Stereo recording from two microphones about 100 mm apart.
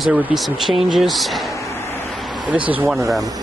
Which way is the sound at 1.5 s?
30° left (ahead or behind).